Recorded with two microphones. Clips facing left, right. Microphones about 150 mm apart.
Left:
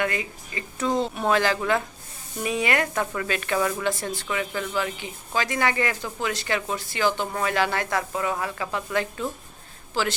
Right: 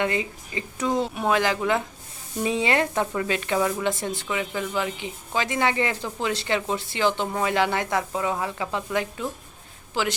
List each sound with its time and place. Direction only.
0.0 s speech: 25° right (ahead or behind)
0.9 s a woman's voice: 10° right (ahead or behind)